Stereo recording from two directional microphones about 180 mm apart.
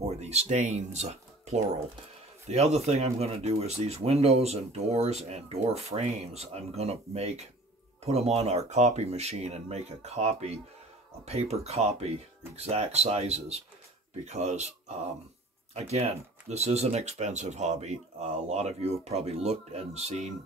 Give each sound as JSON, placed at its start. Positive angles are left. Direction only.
{"t": 0.2, "sound": "speech", "side_deg": -35}
{"t": 15.7, "sound": "speech", "side_deg": -35}